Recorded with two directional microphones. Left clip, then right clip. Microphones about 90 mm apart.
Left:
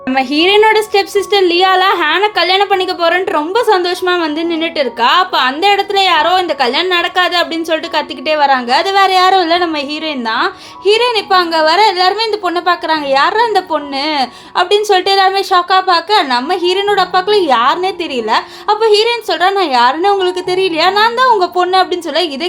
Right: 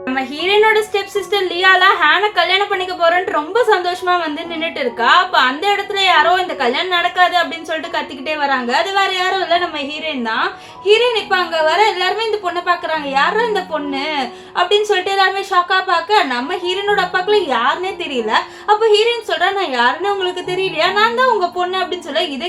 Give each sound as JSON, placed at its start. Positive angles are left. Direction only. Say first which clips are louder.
{"t": 0.2, "sound": "a woman's voice", "louder": "left 5 dB", "side_deg": 90}
{"t": 10.2, "sound": "a woman's voice", "louder": "left 4 dB", "side_deg": 50}